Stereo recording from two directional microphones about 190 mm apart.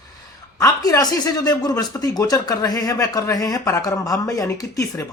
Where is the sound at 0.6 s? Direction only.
20° left (ahead or behind).